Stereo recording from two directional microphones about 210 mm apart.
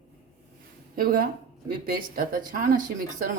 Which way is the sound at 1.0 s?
40° right (ahead or behind).